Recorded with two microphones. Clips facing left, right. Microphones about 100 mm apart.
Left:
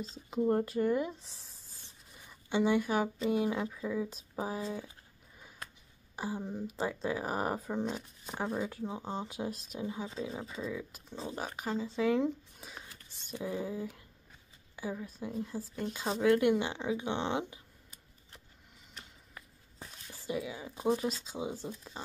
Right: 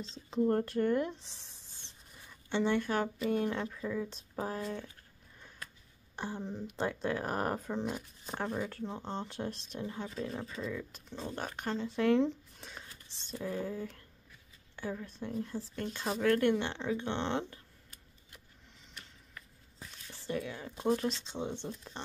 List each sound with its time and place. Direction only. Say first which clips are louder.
0.0 s speech: even; 5° left (ahead or behind)
6.1 s speech: left 2 dB; 5° left (ahead or behind)
18.9 s a sound: left 1 dB; 30° left (ahead or behind)
20.1 s speech: even; 10° left (ahead or behind)